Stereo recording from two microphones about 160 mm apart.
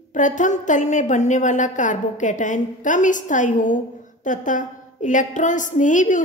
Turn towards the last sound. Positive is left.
turn(degrees=50)  # may be behind; listen again after turning